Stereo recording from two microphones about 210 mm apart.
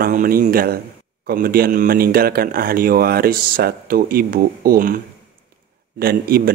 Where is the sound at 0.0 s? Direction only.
45° right (ahead or behind).